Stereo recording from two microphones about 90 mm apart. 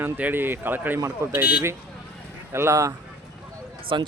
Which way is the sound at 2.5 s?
30° right (ahead or behind).